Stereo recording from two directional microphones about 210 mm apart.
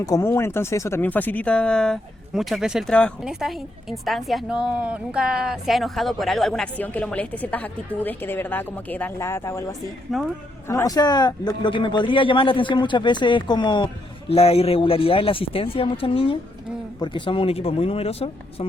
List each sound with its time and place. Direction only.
0.0 s speech: 15° left (ahead or behind)
10.1 s speech: centre (ahead or behind)
10.7 s speech: 15° left (ahead or behind)